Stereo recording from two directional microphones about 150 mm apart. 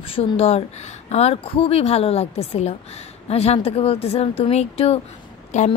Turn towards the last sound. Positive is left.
turn(degrees=50)  # may be behind; listen again after turning